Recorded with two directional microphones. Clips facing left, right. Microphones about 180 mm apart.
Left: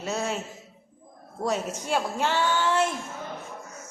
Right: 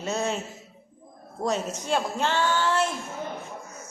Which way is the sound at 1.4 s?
10° left (ahead or behind).